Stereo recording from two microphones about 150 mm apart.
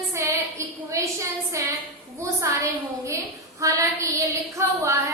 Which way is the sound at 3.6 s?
20° right (ahead or behind).